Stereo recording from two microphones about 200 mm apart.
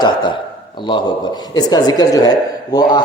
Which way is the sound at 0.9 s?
20° left (ahead or behind).